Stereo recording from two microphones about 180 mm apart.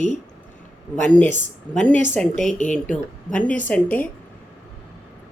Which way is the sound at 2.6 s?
45° left (ahead or behind).